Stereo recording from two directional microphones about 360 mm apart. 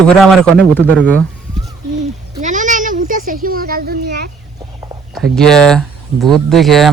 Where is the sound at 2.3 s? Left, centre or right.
Centre.